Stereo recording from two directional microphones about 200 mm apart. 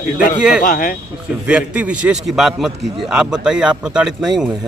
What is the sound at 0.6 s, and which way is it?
Speech, 45° left (ahead or behind).